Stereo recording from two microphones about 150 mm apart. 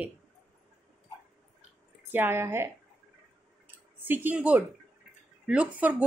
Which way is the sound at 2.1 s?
15° right (ahead or behind).